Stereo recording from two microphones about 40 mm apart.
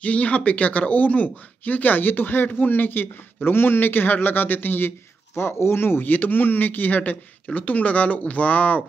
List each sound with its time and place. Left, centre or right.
0.0 s a man's voice: left